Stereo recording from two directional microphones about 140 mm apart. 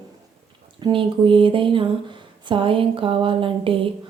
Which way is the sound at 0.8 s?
35° right (ahead or behind).